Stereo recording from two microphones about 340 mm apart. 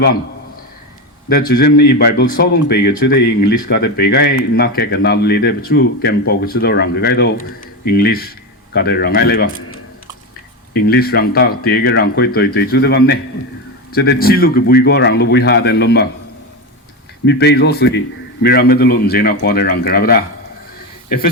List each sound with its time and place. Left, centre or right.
1.3 s speech: left
17.2 s speech: left